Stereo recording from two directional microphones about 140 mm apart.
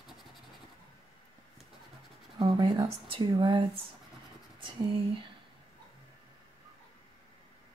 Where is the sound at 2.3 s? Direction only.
35° right (ahead or behind).